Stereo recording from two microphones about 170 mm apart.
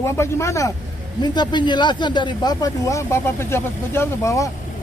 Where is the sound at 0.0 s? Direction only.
15° left (ahead or behind).